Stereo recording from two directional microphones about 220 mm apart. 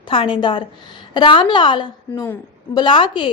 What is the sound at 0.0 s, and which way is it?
A woman's voice, 25° left (ahead or behind).